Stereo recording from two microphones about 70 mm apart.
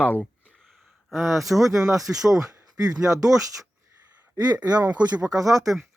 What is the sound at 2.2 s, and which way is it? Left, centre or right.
Speech, right.